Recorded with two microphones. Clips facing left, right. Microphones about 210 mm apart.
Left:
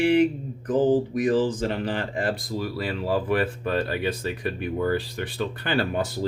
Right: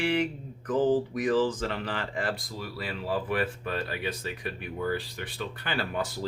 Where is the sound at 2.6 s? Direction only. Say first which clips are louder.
Left 7 dB; 35° left (ahead or behind).